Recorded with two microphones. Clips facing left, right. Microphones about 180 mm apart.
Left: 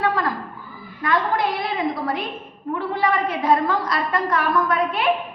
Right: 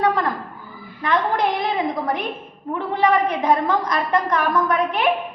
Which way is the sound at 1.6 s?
20° right (ahead or behind).